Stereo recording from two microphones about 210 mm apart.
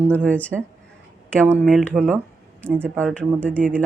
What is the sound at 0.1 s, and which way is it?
Speech, 10° left (ahead or behind).